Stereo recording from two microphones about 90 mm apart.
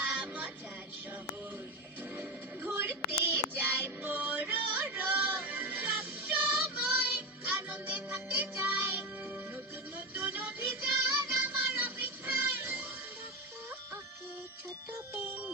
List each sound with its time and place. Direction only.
0.0 s music: 10° right (ahead or behind)
2.1 s music: 20° right (ahead or behind)
15.1 s music: 20° right (ahead or behind)